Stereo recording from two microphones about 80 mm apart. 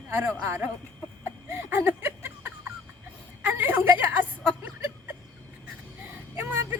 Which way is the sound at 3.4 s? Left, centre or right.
Right.